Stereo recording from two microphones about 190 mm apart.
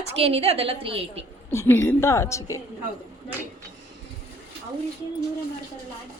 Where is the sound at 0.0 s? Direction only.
35° right (ahead or behind).